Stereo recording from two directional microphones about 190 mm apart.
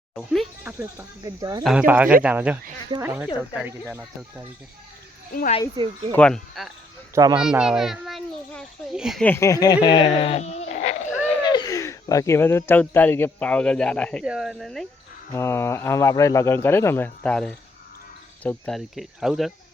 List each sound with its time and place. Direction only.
0.2 s speech: 5° right (ahead or behind); by 1.6 s 20° right (ahead or behind)
1.6 s speech: 5° right (ahead or behind)
5.3 s speech: 45° left (ahead or behind)
6.1 s speech: 5° left (ahead or behind)
7.2 s a child's voice: 20° right (ahead or behind)
7.4 s a child's voice: 5° right (ahead or behind)
9.2 s speech: 15° left (ahead or behind); by 11.1 s 35° left (ahead or behind)
11.3 s speech: 25° left (ahead or behind); by 14.8 s centre (ahead or behind)
15.3 s speech: 15° left (ahead or behind); by 19.5 s centre (ahead or behind)